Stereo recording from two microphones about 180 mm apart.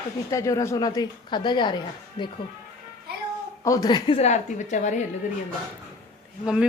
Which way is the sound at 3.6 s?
20° left (ahead or behind).